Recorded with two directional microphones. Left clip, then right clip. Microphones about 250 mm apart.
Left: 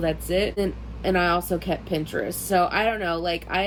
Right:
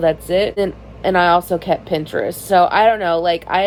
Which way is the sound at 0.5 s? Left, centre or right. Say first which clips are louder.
Right 7 dB; right.